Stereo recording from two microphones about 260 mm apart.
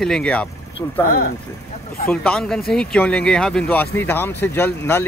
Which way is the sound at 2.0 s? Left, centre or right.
Centre.